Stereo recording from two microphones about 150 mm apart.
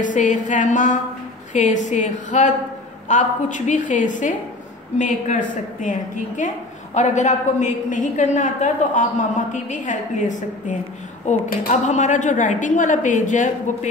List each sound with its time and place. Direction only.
0.0 s a woman's voice: 55° left (ahead or behind)